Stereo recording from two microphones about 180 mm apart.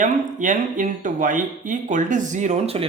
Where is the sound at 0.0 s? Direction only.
45° right (ahead or behind).